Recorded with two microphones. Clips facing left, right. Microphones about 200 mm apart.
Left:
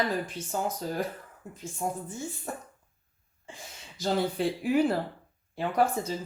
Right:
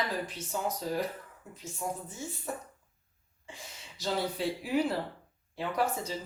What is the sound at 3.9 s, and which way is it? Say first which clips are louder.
Speech: left 5 dB; 50° left (ahead or behind).